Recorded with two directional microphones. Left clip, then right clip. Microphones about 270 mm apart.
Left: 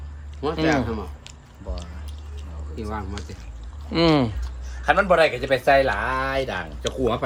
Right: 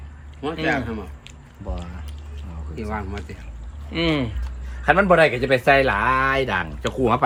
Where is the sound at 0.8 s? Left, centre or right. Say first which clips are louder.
Left 2 dB; left.